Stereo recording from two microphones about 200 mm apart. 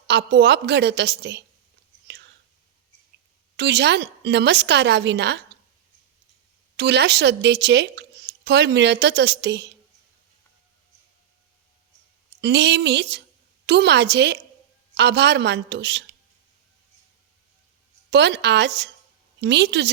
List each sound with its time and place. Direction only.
0.1 s speech: 55° right (ahead or behind)
3.6 s speech: 55° right (ahead or behind)
6.7 s speech: 60° right (ahead or behind)
12.4 s speech: 55° right (ahead or behind)
18.1 s speech: 60° right (ahead or behind)